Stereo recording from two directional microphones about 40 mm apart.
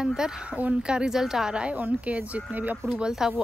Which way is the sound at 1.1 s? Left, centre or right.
Centre.